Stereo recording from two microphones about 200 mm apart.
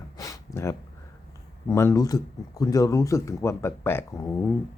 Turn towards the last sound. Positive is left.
turn(degrees=15)  # may be behind; listen again after turning